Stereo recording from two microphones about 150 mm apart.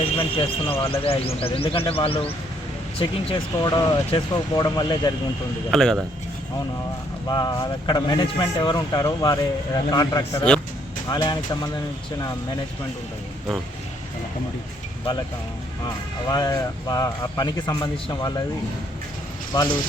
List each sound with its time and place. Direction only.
0.0 s speech: 40° left (ahead or behind)
5.7 s speech: 5° left (ahead or behind)
7.3 s speech: 30° left (ahead or behind)
16.3 s speech: 25° left (ahead or behind)
19.5 s speech: 25° left (ahead or behind)